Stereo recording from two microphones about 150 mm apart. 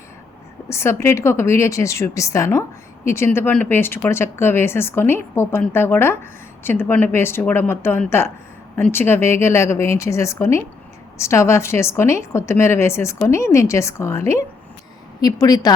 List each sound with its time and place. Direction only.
0.7 s a woman's voice: 20° left (ahead or behind)